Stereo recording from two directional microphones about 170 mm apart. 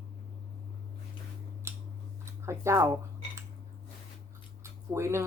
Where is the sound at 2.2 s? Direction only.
15° right (ahead or behind).